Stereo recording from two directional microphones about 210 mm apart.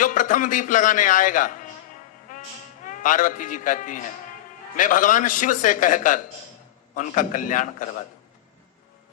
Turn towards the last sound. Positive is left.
turn(degrees=40)  # may be behind; listen again after turning